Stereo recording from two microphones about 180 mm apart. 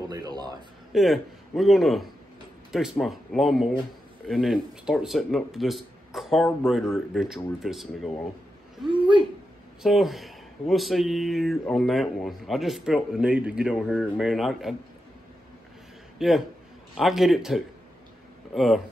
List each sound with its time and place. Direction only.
0.1 s a sound: 20° right (ahead or behind)
0.9 s speech: centre (ahead or behind)
9.8 s speech: centre (ahead or behind)
16.2 s speech: centre (ahead or behind)